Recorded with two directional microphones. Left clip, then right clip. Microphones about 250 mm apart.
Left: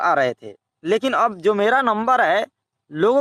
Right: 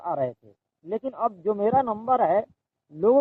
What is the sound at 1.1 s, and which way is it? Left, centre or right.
Speech, left.